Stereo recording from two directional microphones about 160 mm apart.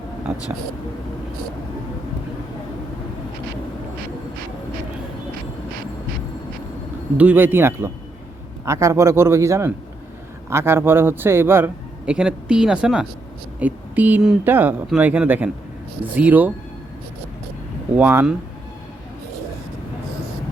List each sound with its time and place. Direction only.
7.2 s a man's voice: 10° right (ahead or behind)
17.9 s a man's voice: 10° right (ahead or behind)